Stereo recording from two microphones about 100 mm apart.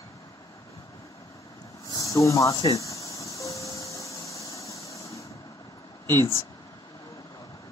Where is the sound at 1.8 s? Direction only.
35° left (ahead or behind).